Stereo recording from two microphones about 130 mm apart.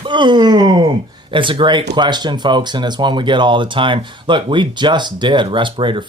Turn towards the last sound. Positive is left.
turn(degrees=-40)  # may be behind; listen again after turning